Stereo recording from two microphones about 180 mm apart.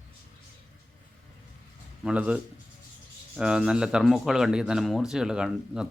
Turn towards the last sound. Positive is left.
turn(degrees=-5)  # may be behind; listen again after turning